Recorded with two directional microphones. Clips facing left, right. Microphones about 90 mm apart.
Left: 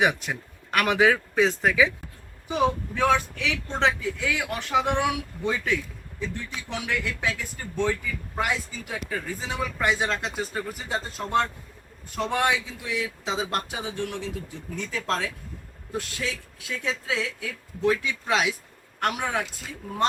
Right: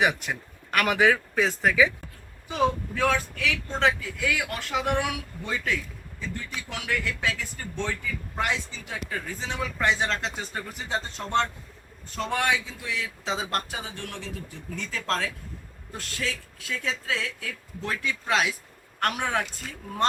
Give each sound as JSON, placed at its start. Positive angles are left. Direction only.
{"t": 0.3, "sound": "speech", "side_deg": 20}
{"t": 5.6, "sound": "a sound", "side_deg": 15}
{"t": 6.7, "sound": "speech", "side_deg": 20}